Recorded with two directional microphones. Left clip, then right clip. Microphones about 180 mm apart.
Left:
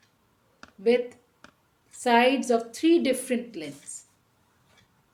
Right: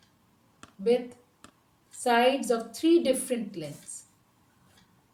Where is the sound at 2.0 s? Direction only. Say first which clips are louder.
Left 2 dB; 55° left (ahead or behind).